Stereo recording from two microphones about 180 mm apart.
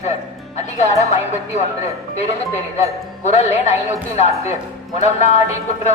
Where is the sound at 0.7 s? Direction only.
40° left (ahead or behind).